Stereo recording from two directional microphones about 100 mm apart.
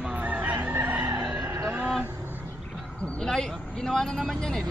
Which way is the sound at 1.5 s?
30° right (ahead or behind).